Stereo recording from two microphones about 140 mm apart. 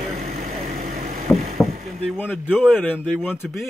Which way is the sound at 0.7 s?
90° right.